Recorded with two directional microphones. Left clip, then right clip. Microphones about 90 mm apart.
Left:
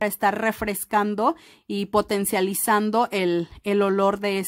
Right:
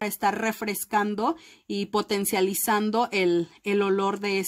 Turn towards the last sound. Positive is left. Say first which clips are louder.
# left 4 dB
turn(degrees=40)  # may be behind; listen again after turning